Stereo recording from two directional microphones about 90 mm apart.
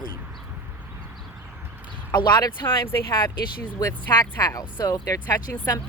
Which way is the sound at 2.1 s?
50° left (ahead or behind).